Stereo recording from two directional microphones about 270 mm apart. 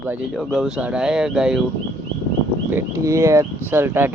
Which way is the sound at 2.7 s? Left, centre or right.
Centre.